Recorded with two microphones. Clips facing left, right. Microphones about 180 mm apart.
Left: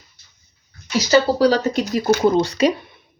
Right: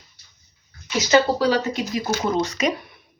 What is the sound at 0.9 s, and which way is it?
Speech, 40° left (ahead or behind).